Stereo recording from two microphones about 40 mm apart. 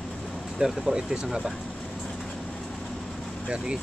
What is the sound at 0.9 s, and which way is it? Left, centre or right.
Speech, centre.